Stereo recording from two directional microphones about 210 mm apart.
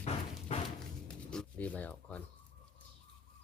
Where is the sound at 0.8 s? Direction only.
5° left (ahead or behind).